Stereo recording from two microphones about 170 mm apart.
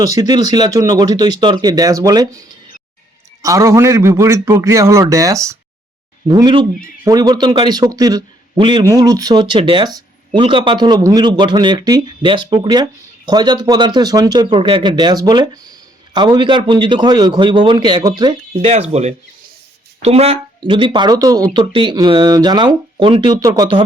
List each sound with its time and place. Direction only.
0.0 s speech: 20° right (ahead or behind)
3.4 s a man's voice: 20° right (ahead or behind)